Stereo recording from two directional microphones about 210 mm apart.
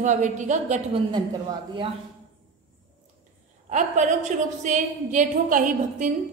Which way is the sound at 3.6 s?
35° right (ahead or behind).